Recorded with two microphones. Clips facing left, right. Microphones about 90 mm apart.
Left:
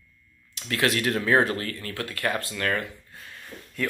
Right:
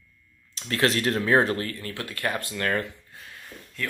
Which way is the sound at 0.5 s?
25° right (ahead or behind).